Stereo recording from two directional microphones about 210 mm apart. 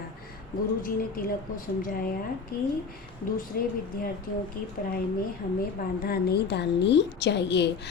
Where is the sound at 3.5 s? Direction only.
45° left (ahead or behind).